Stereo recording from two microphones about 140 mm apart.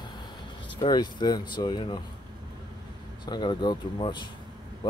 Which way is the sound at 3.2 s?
35° left (ahead or behind).